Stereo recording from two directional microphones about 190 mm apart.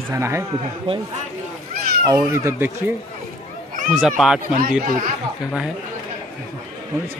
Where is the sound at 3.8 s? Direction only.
5° right (ahead or behind).